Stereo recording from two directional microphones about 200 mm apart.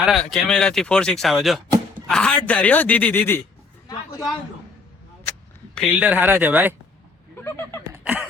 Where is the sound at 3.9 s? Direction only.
20° left (ahead or behind).